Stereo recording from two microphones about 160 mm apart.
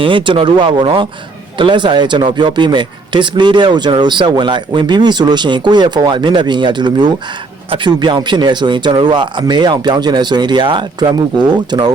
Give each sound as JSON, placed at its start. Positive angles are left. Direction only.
{"t": 0.0, "sound": "speech", "side_deg": -30}